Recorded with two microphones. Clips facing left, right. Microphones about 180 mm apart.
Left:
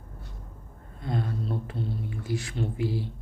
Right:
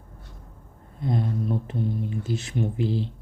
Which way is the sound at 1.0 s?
20° right (ahead or behind).